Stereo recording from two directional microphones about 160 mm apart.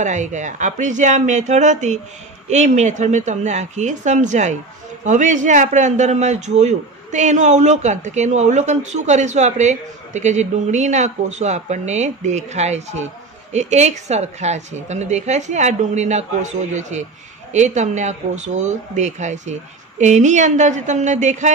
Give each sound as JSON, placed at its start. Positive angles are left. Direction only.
{"t": 0.0, "sound": "a man's voice", "side_deg": -50}